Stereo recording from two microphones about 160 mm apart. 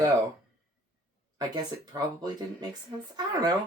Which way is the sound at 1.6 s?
25° right (ahead or behind).